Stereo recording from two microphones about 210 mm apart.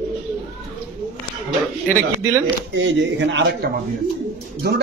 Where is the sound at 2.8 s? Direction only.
60° right (ahead or behind).